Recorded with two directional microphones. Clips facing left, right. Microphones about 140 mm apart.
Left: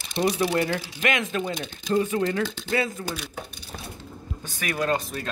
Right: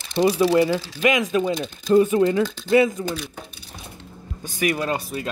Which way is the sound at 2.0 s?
15° right (ahead or behind).